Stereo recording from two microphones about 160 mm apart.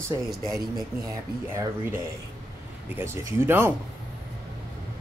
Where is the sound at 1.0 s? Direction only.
20° right (ahead or behind).